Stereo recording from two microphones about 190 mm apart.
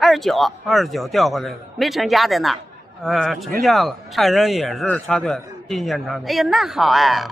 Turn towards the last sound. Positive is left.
turn(degrees=0)  # may be behind; listen again after turning